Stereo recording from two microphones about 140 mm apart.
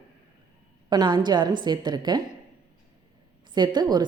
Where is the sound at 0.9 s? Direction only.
30° right (ahead or behind).